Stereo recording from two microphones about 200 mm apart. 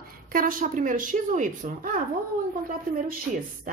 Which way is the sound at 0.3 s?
45° right (ahead or behind).